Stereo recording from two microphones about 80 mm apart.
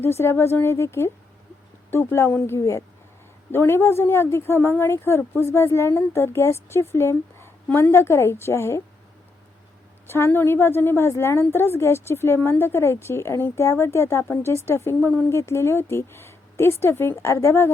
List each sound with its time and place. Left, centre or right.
0.0 s a woman's voice: left
10.1 s a woman's voice: left
15.3 s a woman's voice: left